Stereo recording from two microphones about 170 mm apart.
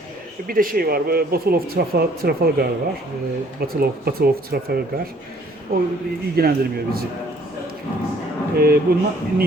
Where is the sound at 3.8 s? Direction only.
65° right (ahead or behind).